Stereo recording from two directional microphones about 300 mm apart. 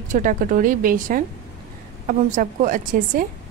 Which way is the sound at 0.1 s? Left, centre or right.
Right.